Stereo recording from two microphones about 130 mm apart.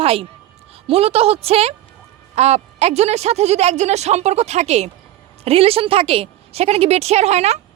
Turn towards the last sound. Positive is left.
turn(degrees=-55)  # may be behind; listen again after turning